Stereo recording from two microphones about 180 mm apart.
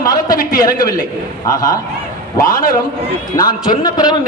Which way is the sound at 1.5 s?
20° left (ahead or behind).